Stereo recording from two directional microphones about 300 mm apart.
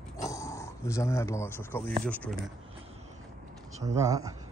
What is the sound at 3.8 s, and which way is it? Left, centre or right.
Speech, centre.